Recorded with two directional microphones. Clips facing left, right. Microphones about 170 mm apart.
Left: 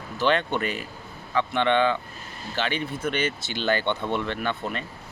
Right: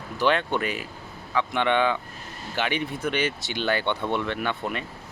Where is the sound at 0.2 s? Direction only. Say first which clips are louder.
Even; 10° right (ahead or behind).